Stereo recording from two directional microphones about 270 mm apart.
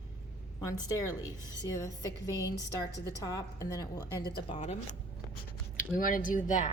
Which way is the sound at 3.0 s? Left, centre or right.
Centre.